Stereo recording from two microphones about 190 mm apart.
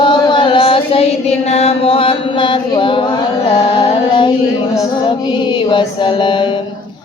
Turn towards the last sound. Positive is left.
turn(degrees=25)  # may be behind; listen again after turning